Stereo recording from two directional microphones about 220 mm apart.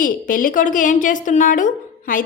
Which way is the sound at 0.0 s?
40° left (ahead or behind).